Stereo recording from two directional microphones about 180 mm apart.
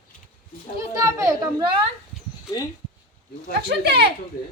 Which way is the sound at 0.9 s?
15° right (ahead or behind).